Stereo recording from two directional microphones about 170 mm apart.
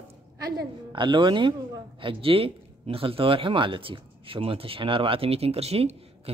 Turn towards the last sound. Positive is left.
turn(degrees=-35)  # may be behind; listen again after turning